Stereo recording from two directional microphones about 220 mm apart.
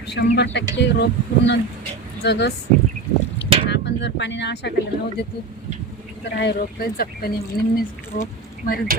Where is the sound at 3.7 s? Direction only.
50° left (ahead or behind).